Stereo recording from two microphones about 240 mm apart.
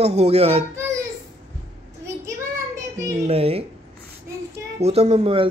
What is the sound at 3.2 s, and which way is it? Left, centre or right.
Speech, right.